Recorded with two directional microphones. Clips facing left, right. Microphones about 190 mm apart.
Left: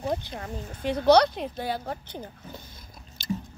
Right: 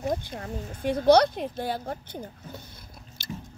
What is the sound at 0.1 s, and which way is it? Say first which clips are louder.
Speech: even; 50° right (ahead or behind).